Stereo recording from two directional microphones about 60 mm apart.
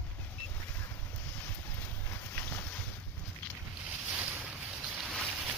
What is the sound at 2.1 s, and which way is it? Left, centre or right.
Boat, left.